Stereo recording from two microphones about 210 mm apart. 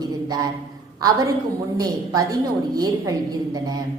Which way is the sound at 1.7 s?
15° right (ahead or behind).